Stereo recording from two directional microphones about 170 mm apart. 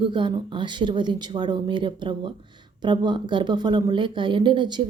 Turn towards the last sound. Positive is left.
turn(degrees=-25)  # may be behind; listen again after turning